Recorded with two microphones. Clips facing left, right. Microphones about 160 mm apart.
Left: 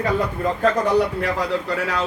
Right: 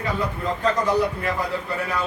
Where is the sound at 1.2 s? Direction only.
90° left.